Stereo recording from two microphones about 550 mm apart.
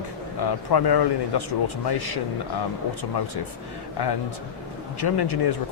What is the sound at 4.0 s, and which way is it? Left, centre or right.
Speech, left.